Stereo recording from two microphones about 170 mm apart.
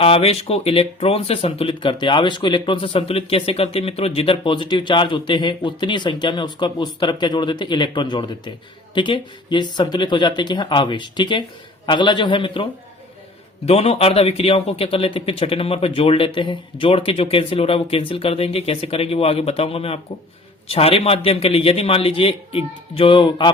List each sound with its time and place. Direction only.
0.0 s speech: 35° left (ahead or behind)
13.7 s speech: 35° left (ahead or behind)